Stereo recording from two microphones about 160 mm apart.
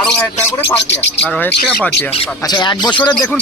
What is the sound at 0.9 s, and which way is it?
Speech, 90° left.